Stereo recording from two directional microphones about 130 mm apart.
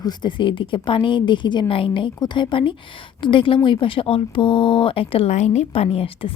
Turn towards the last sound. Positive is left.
turn(degrees=45)  # may be behind; listen again after turning